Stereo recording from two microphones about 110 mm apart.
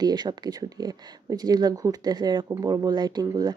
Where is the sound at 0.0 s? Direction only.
40° right (ahead or behind).